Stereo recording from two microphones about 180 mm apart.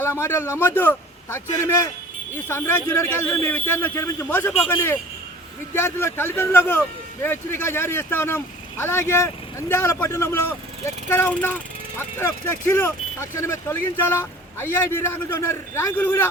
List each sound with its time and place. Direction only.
0.0 s speech: 15° left (ahead or behind)